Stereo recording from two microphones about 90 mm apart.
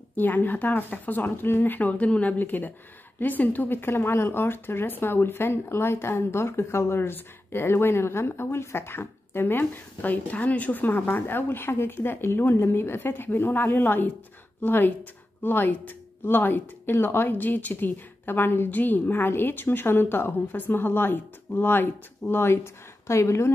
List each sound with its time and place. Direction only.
0.1 s speech: 20° left (ahead or behind)